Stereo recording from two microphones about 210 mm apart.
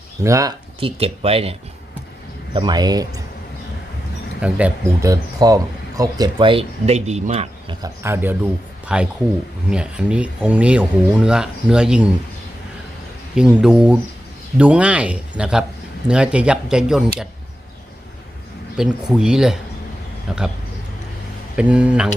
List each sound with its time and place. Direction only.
0.2 s speech: 15° right (ahead or behind)
0.8 s speech: 25° right (ahead or behind)
2.6 s speech: 20° right (ahead or behind)
4.4 s speech: 5° right (ahead or behind); by 7.8 s 30° right (ahead or behind)
7.8 s speech: 10° right (ahead or behind)
13.3 s speech: 5° right (ahead or behind)
18.8 s speech: centre (ahead or behind)
21.5 s speech: 5° right (ahead or behind)